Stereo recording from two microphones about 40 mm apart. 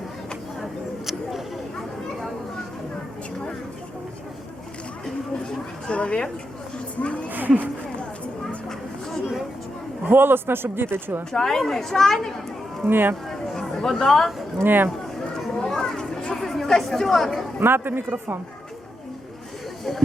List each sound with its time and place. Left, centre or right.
0.6 s a sound: centre
5.9 s a sound: left
7.3 s a sound: right
10.1 s speech: right
11.3 s speech: centre
12.8 s a man's voice: right
13.2 s chatter: centre
13.9 s speech: centre
14.6 s a man's voice: right
15.5 s chatter: centre
17.6 s a man's voice: right